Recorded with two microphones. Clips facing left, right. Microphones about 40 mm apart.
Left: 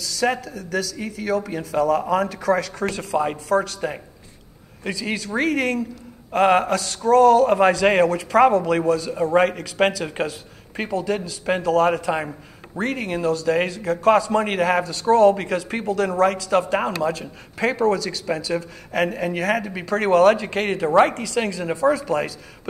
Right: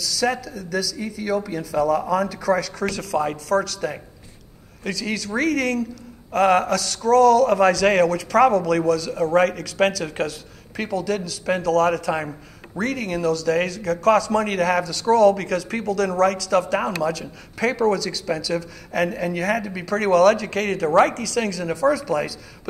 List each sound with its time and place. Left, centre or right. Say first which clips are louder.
0.2 s a man's voice: left 1 dB; left
4.8 s a man's voice: even; left
19.1 s a man's voice: left 1 dB; left